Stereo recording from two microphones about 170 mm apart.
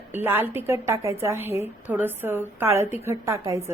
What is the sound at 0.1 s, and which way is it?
A woman's voice, 10° right (ahead or behind).